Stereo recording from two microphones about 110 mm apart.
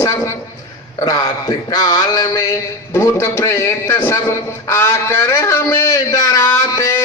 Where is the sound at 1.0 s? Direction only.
35° left (ahead or behind).